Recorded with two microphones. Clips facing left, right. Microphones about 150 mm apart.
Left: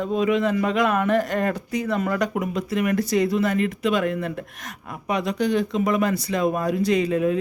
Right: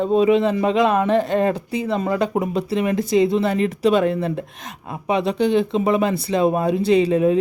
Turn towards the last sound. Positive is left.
turn(degrees=-30)  # may be behind; listen again after turning